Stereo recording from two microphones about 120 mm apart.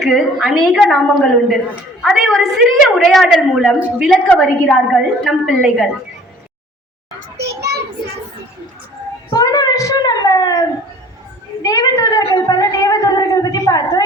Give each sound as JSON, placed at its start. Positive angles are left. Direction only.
{"t": 0.0, "sound": "a woman's voice", "side_deg": 0}
{"t": 3.8, "sound": "a woman's voice", "side_deg": -10}
{"t": 4.3, "sound": "a woman's voice", "side_deg": 10}
{"t": 9.3, "sound": "a sound", "side_deg": 30}